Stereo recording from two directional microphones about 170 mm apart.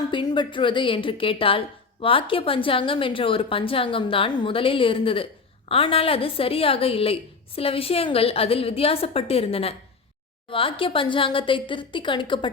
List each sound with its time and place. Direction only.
0.1 s a woman's voice: 30° left (ahead or behind)